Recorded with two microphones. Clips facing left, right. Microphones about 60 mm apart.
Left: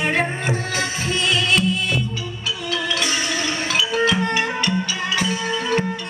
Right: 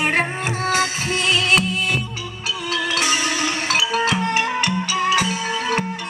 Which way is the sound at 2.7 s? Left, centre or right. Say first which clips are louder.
Right 2 dB; right.